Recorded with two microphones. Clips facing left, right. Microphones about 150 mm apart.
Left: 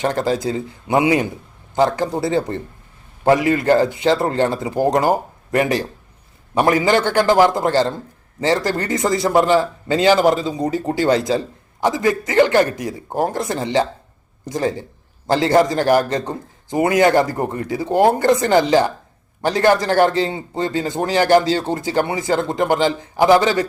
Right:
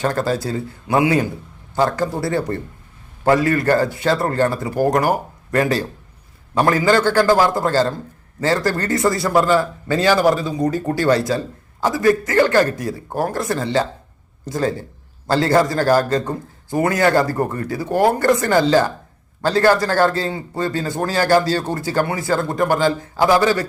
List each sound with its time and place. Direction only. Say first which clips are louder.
0.0 s a man's voice: left 1 dB; 20° left (ahead or behind)